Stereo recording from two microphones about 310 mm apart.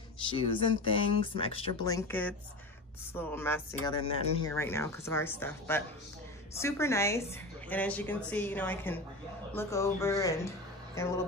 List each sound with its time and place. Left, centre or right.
0.2 s a woman's voice: centre